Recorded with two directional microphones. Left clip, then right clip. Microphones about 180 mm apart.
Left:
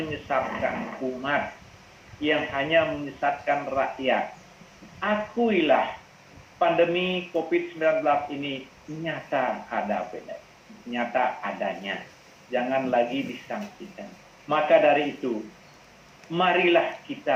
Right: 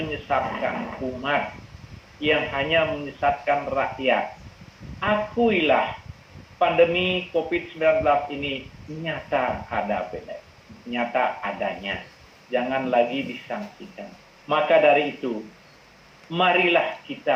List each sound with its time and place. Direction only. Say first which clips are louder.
0.0 s speech: right 2 dB; 35° right (ahead or behind)